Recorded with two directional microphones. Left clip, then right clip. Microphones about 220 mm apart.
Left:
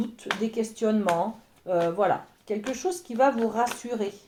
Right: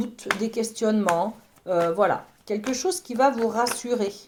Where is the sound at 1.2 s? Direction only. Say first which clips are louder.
Right 2 dB; 40° right (ahead or behind).